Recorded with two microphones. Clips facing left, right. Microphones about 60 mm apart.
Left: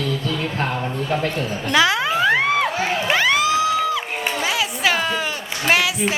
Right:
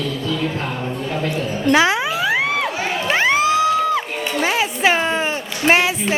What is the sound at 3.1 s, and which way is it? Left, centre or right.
Music, right.